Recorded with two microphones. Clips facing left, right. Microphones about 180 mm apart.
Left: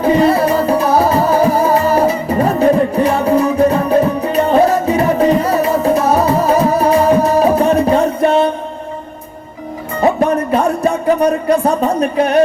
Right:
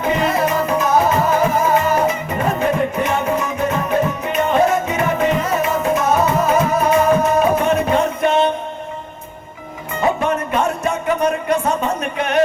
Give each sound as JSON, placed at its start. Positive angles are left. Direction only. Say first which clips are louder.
{"t": 0.0, "sound": "music", "louder": "left 6 dB", "side_deg": 35}
{"t": 10.0, "sound": "music", "louder": "left 5 dB", "side_deg": 35}